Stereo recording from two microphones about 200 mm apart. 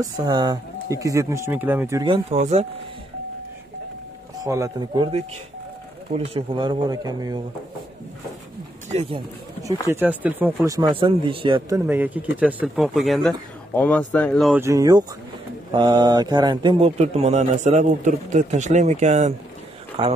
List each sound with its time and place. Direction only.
0.0 s speech: 20° right (ahead or behind)
4.5 s speech: 15° right (ahead or behind)
8.9 s speech: 25° right (ahead or behind)
9.8 s speech: 10° right (ahead or behind)
11.9 s speech: 10° right (ahead or behind)
14.5 s a man's voice: 15° right (ahead or behind)